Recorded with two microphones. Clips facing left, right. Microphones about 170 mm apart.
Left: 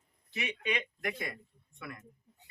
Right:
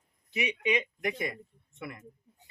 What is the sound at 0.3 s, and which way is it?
A man's voice, 15° right (ahead or behind).